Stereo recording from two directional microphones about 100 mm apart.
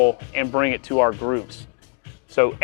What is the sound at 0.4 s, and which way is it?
Speech, 20° left (ahead or behind).